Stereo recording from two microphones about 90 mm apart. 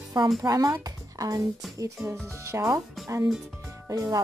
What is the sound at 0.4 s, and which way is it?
Speech, 45° right (ahead or behind).